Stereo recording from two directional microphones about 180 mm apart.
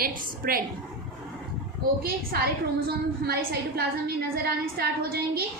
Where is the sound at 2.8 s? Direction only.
60° right (ahead or behind).